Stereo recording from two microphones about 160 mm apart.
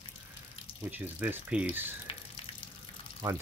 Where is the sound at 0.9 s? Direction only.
10° right (ahead or behind).